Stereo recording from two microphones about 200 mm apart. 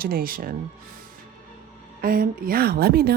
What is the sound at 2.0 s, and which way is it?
Speech, 50° right (ahead or behind).